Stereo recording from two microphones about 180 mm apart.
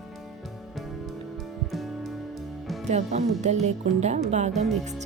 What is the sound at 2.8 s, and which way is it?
Speech, 40° right (ahead or behind).